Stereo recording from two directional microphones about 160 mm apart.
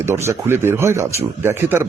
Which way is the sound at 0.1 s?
15° right (ahead or behind).